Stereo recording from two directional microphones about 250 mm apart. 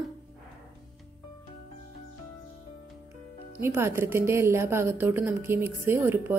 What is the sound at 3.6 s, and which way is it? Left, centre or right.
A woman's voice, centre.